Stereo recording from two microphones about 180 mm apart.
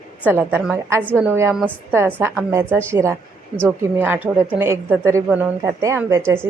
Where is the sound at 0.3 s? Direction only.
10° right (ahead or behind).